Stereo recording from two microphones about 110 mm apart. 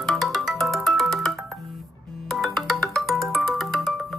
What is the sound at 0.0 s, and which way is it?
Music, centre (ahead or behind).